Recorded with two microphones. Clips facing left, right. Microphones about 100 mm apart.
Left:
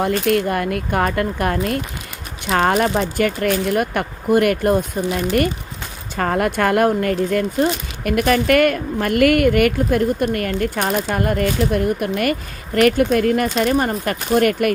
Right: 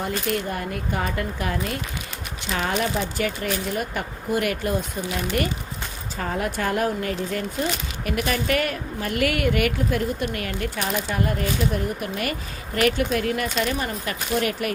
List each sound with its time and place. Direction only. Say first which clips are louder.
0.1 s speech: left 8 dB; 65° left (ahead or behind)
6.1 s speech: left 8 dB; 65° left (ahead or behind)